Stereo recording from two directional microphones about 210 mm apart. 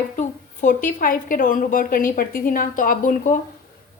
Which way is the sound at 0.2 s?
35° left (ahead or behind).